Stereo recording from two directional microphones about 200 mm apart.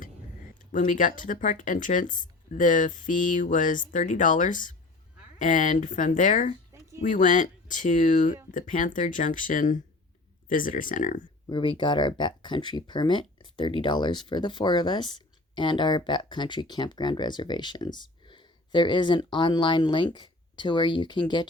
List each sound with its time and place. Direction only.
0.6 s speech: 40° left (ahead or behind)
11.4 s speech: 25° left (ahead or behind)